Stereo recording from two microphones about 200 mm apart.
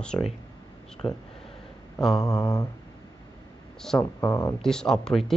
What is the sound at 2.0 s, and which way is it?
Mantra, centre (ahead or behind).